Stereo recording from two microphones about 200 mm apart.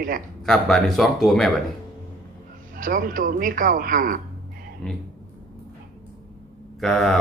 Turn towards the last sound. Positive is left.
turn(degrees=0)  # may be behind; listen again after turning